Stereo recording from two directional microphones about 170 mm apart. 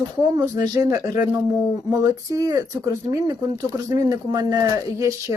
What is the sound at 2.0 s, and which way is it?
Speech, 20° right (ahead or behind).